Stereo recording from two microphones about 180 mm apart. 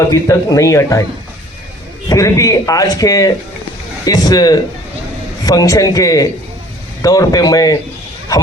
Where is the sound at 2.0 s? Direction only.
20° left (ahead or behind).